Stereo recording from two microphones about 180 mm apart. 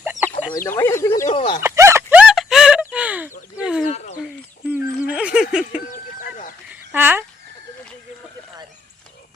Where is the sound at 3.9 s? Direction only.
40° left (ahead or behind).